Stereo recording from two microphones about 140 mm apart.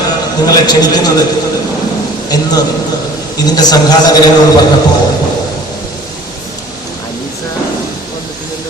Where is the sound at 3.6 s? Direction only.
30° left (ahead or behind).